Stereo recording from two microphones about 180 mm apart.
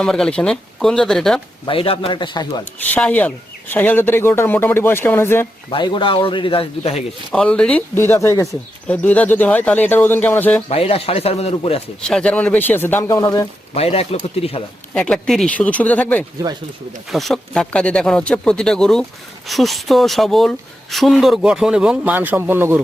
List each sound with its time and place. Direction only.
0.0 s speech: 5° left (ahead or behind)
1.6 s a man's voice: 30° left (ahead or behind)
2.9 s speech: 10° left (ahead or behind)
5.7 s a man's voice: 25° left (ahead or behind)
7.3 s speech: 5° left (ahead or behind)
10.7 s speech: 35° left (ahead or behind)
12.0 s speech: 5° left (ahead or behind); by 13.5 s 20° left (ahead or behind)
13.7 s speech: 35° left (ahead or behind)
14.9 s speech: 5° left (ahead or behind)